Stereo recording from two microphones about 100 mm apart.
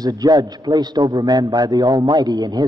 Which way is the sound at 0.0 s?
40° right (ahead or behind).